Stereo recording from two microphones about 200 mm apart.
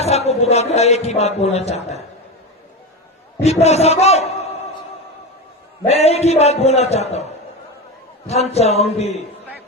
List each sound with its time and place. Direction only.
0.0 s a man's voice: 30° left (ahead or behind)
3.4 s a man's voice: 30° left (ahead or behind)
5.8 s a man's voice: 30° left (ahead or behind)
8.3 s a man's voice: 30° left (ahead or behind)